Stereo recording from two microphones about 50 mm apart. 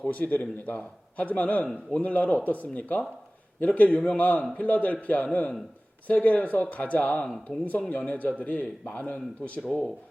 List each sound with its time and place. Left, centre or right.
0.0 s a man's voice: left